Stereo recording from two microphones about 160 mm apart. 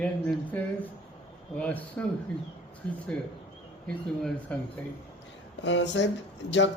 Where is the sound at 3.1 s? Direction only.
5° left (ahead or behind).